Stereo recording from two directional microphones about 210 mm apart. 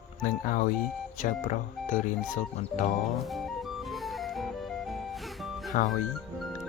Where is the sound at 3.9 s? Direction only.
Centre (ahead or behind).